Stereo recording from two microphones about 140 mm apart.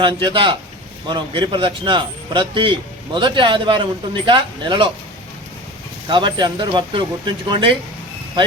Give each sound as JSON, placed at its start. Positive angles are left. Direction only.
{"t": 0.0, "sound": "speech", "side_deg": -30}
{"t": 6.1, "sound": "speech", "side_deg": -35}